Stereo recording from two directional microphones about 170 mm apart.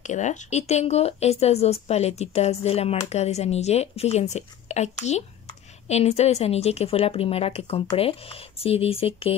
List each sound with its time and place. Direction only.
0.0 s speech: 45° left (ahead or behind)